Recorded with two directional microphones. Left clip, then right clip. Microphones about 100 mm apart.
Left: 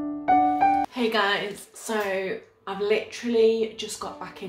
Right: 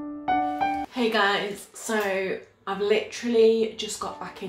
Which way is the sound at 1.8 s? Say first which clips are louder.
Right 1 dB; 15° left (ahead or behind).